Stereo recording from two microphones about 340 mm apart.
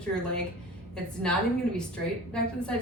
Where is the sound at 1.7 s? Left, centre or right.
Centre.